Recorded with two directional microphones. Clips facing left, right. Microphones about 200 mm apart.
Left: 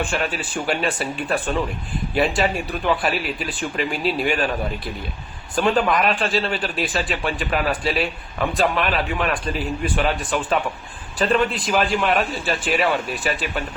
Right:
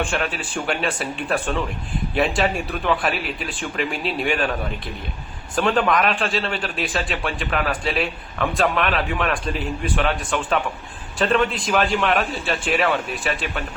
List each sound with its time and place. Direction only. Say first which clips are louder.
0.0 s a man's voice: even; centre (ahead or behind)
5.5 s a man's voice: even; centre (ahead or behind)